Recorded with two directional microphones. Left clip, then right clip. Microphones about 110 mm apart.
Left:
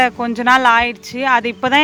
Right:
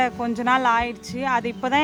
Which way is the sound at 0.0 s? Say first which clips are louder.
Left 7 dB; 30° left (ahead or behind).